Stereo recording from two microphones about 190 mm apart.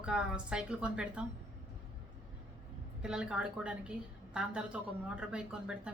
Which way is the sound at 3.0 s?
5° right (ahead or behind).